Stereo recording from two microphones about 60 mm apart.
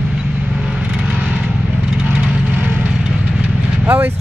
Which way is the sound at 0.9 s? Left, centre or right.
Centre.